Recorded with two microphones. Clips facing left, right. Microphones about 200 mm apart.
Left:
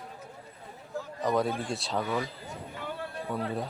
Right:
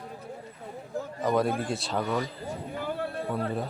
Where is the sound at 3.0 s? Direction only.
45° right (ahead or behind).